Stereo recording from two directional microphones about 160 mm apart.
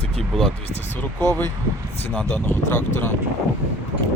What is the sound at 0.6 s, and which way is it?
Speech, 45° left (ahead or behind).